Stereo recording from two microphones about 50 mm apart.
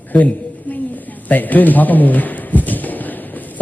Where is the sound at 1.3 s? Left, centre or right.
Left.